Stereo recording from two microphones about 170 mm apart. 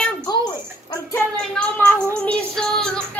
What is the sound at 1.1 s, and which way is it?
Speech, 10° left (ahead or behind).